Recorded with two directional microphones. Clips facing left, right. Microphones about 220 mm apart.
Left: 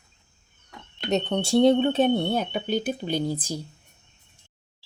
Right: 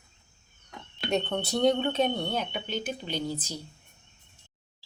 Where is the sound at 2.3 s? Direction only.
45° left (ahead or behind).